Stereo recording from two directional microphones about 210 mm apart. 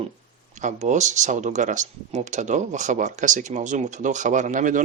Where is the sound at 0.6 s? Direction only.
35° right (ahead or behind).